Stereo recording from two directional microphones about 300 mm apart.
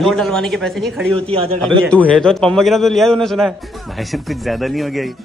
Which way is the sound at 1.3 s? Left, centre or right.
Centre.